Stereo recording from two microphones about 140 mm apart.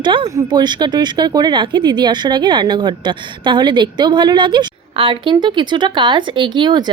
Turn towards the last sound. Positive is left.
turn(degrees=-30)  # may be behind; listen again after turning